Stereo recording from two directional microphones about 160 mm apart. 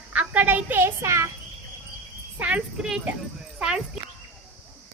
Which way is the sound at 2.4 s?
10° right (ahead or behind).